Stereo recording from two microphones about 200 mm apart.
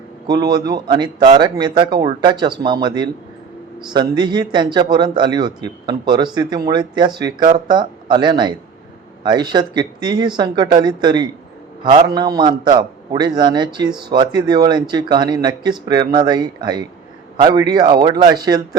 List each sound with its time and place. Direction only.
0.3 s speech: 20° right (ahead or behind)